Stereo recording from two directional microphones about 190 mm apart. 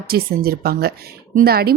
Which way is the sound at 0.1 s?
55° right (ahead or behind).